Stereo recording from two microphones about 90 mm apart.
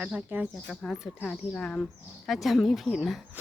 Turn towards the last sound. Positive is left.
turn(degrees=0)  # may be behind; listen again after turning